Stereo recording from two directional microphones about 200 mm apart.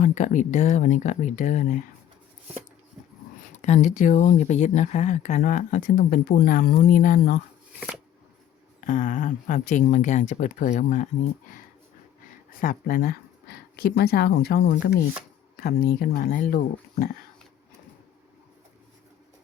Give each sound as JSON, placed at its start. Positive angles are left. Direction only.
{"t": 0.0, "sound": "speech", "side_deg": 40}
{"t": 3.5, "sound": "speech", "side_deg": 35}
{"t": 8.9, "sound": "speech", "side_deg": 40}
{"t": 12.5, "sound": "speech", "side_deg": 45}